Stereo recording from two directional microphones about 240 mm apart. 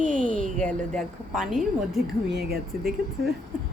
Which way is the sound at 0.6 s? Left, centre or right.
Centre.